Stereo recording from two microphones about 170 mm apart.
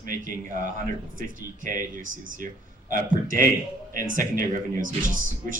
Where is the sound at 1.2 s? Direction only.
50° right (ahead or behind).